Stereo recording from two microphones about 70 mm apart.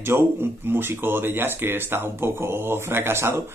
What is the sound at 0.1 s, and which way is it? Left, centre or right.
Speech, right.